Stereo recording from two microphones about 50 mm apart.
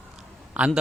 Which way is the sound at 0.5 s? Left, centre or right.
Right.